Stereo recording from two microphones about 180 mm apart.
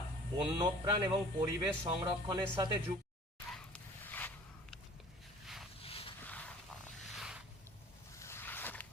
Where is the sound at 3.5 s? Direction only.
5° left (ahead or behind).